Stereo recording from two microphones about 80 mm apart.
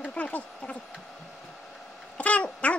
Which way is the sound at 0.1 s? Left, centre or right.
Centre.